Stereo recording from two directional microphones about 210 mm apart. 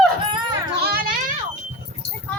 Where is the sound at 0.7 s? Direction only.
45° right (ahead or behind).